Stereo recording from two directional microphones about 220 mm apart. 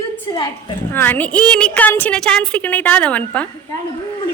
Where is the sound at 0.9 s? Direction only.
10° left (ahead or behind).